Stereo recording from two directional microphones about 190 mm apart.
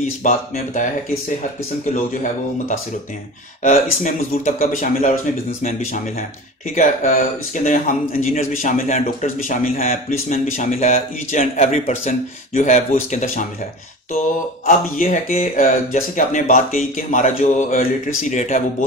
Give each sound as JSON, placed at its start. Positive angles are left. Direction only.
{"t": 0.2, "sound": "a man's voice", "side_deg": 40}
{"t": 3.6, "sound": "speech", "side_deg": 40}
{"t": 6.7, "sound": "a man's voice", "side_deg": 40}
{"t": 15.0, "sound": "a man's voice", "side_deg": 45}